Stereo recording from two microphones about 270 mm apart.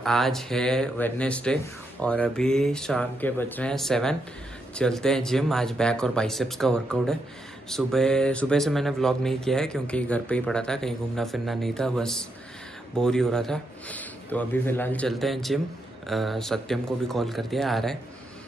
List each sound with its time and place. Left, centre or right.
0.0 s speech: centre